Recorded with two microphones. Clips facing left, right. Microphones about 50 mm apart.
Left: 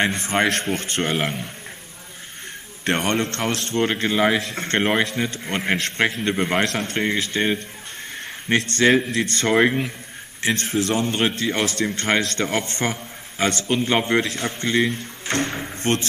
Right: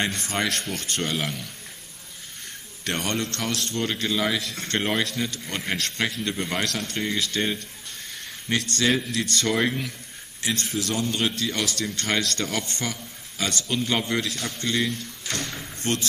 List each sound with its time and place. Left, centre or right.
0.0 s a man's voice: left
2.8 s a man's voice: left